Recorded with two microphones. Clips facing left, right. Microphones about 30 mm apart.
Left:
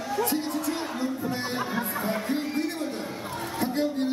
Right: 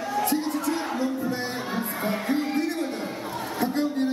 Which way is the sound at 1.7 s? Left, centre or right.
Centre.